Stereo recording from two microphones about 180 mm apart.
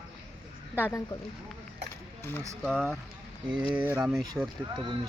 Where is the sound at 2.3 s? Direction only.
5° left (ahead or behind).